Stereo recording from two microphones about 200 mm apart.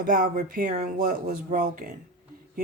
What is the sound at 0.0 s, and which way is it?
Speech, 45° right (ahead or behind).